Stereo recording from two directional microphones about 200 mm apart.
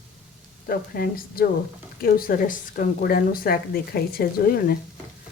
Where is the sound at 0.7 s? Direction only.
45° left (ahead or behind).